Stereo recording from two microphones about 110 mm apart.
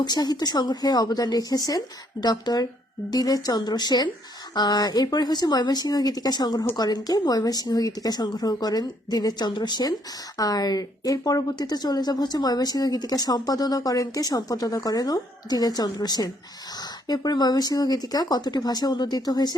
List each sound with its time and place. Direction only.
0.0 s a woman's voice: 40° left (ahead or behind)